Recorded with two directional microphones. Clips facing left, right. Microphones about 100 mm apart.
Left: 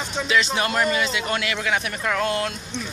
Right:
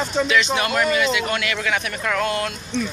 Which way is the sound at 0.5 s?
30° left (ahead or behind).